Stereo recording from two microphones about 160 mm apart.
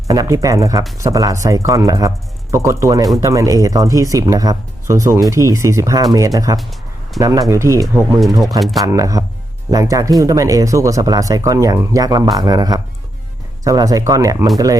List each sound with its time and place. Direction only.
0.1 s speech: 20° right (ahead or behind)
8.4 s speech: centre (ahead or behind)
8.8 s speech: 20° right (ahead or behind)